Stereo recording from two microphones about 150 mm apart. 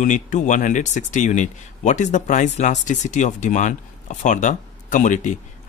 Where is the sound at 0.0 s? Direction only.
55° left (ahead or behind).